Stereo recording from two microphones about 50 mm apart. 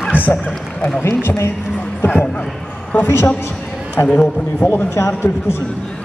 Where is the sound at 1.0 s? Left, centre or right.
Left.